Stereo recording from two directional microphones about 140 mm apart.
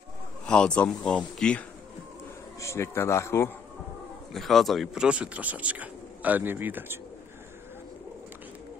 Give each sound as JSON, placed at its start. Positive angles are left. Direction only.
{"t": 0.5, "sound": "speech", "side_deg": 10}
{"t": 2.6, "sound": "a man's voice", "side_deg": 20}
{"t": 4.3, "sound": "speech", "side_deg": 0}